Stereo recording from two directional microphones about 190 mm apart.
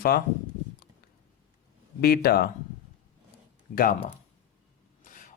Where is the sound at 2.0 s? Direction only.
50° left (ahead or behind).